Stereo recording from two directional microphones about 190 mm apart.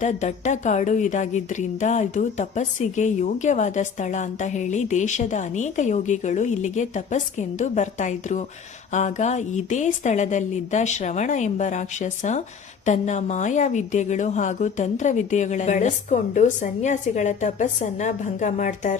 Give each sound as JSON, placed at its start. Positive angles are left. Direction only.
{"t": 0.0, "sound": "speech", "side_deg": 40}